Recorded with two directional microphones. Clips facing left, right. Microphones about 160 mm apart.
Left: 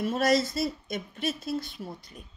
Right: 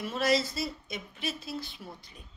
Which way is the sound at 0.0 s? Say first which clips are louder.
Left 4 dB; 45° left (ahead or behind).